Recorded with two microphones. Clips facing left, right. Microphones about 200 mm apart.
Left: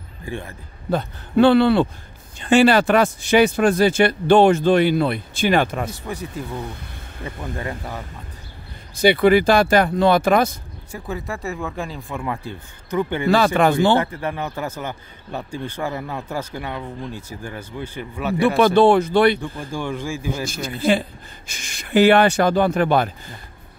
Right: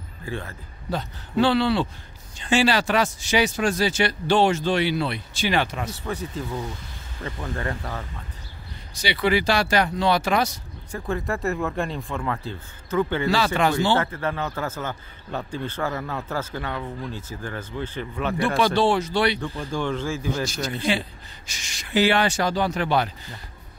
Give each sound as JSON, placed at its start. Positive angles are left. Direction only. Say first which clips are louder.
{"t": 0.2, "sound": "a man's voice", "louder": "left 2 dB", "side_deg": 15}
{"t": 0.8, "sound": "speech", "louder": "left 6 dB", "side_deg": 55}
{"t": 6.0, "sound": "a man's voice", "louder": "even", "side_deg": 10}
{"t": 8.9, "sound": "speech", "louder": "left 8 dB", "side_deg": 50}
{"t": 10.9, "sound": "speech", "louder": "right 2 dB", "side_deg": 5}
{"t": 13.3, "sound": "speech", "louder": "left 10 dB", "side_deg": 55}
{"t": 14.1, "sound": "a man's voice", "louder": "left 1 dB", "side_deg": 15}
{"t": 18.8, "sound": "speech", "louder": "left 7 dB", "side_deg": 55}
{"t": 19.7, "sound": "a man's voice", "louder": "even", "side_deg": 10}
{"t": 21.5, "sound": "speech", "louder": "left 6 dB", "side_deg": 55}